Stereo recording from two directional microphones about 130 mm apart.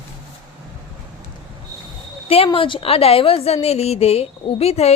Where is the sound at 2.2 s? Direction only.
45° left (ahead or behind).